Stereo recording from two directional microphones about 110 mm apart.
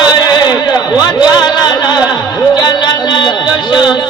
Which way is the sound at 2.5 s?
40° left (ahead or behind).